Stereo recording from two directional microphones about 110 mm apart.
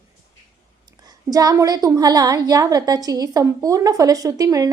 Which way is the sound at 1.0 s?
35° right (ahead or behind).